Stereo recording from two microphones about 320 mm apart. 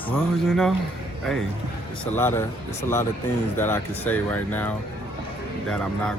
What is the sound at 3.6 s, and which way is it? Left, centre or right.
Speech, centre.